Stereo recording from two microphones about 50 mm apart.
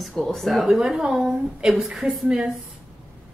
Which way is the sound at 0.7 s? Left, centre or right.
Centre.